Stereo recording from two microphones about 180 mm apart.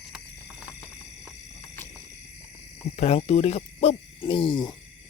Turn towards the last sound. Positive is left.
turn(degrees=25)  # may be behind; listen again after turning